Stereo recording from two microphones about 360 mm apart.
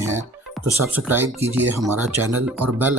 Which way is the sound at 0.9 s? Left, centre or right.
Centre.